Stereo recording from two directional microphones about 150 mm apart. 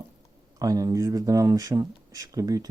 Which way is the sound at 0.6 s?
25° right (ahead or behind).